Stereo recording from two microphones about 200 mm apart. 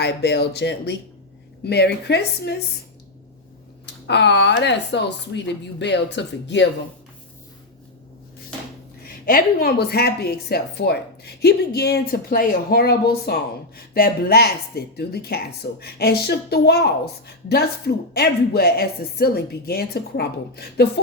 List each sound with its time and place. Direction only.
0.0 s speech: 55° left (ahead or behind)
3.8 s speech: 60° left (ahead or behind)
9.2 s speech: 50° left (ahead or behind)